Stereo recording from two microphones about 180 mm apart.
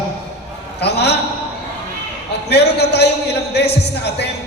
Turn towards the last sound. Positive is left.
turn(degrees=65)  # may be behind; listen again after turning